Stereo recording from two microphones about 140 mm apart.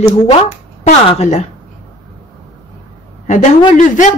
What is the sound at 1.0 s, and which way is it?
Speech, 50° left (ahead or behind).